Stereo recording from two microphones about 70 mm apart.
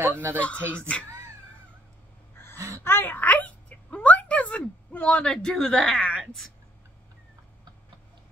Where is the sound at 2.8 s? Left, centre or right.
Left; by 6.1 s centre.